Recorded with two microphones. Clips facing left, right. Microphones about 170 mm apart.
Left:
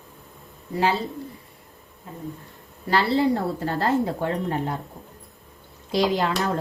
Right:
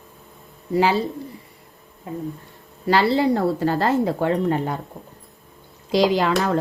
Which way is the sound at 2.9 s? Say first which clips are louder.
Right 3 dB; 90° right.